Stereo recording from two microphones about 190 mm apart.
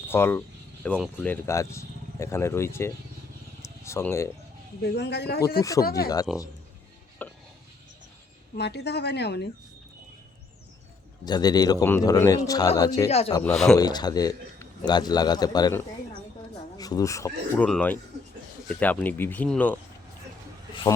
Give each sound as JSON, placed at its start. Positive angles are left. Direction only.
{"t": 0.1, "sound": "speech", "side_deg": 10}
{"t": 3.6, "sound": "a sound", "side_deg": 15}
{"t": 4.8, "sound": "speech", "side_deg": 65}
{"t": 6.3, "sound": "a man's voice", "side_deg": -5}
{"t": 7.2, "sound": "a sound", "side_deg": 10}
{"t": 8.5, "sound": "speech", "side_deg": 60}
{"t": 11.3, "sound": "a man's voice", "side_deg": 20}
{"t": 13.1, "sound": "speech", "side_deg": 35}
{"t": 13.7, "sound": "a man's voice", "side_deg": 20}